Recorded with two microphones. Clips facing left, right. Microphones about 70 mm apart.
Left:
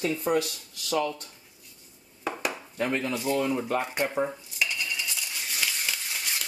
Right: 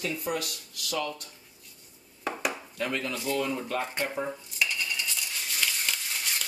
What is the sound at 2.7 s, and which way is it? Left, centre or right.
Chop, left.